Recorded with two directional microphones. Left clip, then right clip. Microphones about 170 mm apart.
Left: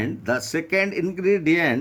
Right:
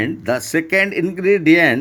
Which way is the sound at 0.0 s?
20° right (ahead or behind).